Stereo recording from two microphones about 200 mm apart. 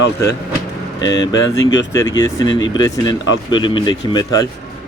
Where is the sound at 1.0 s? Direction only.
20° left (ahead or behind).